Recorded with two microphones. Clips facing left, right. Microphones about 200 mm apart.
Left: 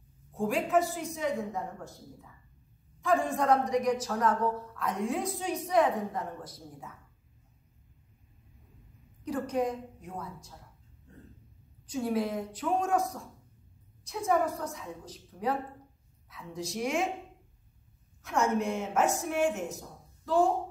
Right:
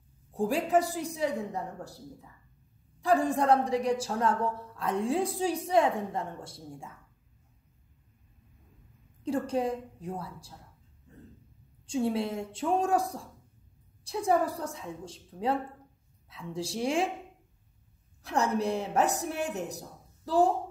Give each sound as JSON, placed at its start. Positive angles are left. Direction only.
{"t": 0.3, "sound": "a woman's voice", "side_deg": -35}
{"t": 3.0, "sound": "a woman's voice", "side_deg": -35}
{"t": 9.2, "sound": "a woman's voice", "side_deg": -30}
{"t": 11.8, "sound": "a woman's voice", "side_deg": -25}
{"t": 18.2, "sound": "a woman's voice", "side_deg": -35}